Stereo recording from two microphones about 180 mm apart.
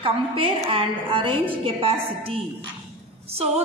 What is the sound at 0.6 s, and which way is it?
A woman's voice, 30° right (ahead or behind).